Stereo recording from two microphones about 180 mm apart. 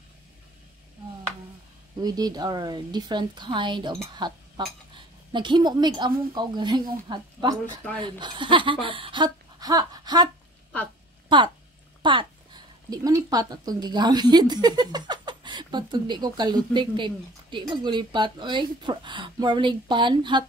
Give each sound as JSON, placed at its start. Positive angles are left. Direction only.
{"t": 2.0, "sound": "speech", "side_deg": -20}